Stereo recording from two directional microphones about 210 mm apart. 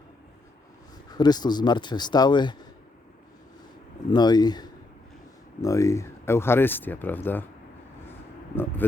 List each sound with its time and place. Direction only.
1.1 s speech: 20° left (ahead or behind)
4.1 s speech: 20° left (ahead or behind)
8.5 s speech: 10° left (ahead or behind)